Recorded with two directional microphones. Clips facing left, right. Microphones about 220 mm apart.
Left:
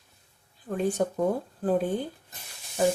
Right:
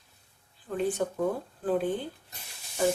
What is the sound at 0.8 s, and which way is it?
Speech, 45° left (ahead or behind).